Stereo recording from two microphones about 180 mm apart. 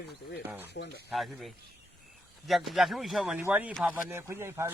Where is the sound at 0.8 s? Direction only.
75° left (ahead or behind).